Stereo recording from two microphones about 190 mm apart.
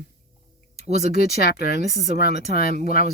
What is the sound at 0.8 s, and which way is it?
Speech, 35° right (ahead or behind).